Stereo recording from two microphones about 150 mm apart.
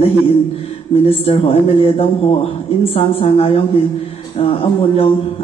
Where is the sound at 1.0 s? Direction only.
40° left (ahead or behind).